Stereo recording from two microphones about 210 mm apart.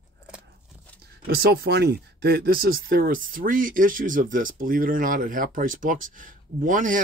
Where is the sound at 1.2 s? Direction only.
45° right (ahead or behind).